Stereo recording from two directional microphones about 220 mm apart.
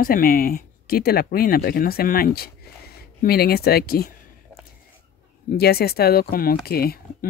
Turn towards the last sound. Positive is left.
turn(degrees=45)  # may be behind; listen again after turning